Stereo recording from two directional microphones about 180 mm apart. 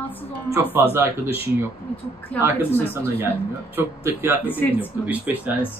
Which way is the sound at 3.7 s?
15° right (ahead or behind).